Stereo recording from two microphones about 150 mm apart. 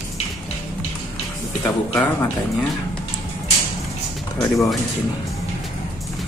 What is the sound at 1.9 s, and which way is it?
Speech, 15° left (ahead or behind).